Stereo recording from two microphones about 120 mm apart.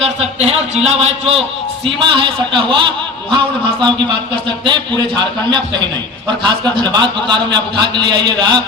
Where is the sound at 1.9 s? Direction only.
45° right (ahead or behind).